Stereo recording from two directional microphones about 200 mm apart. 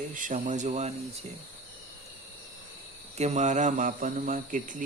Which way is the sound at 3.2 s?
35° right (ahead or behind).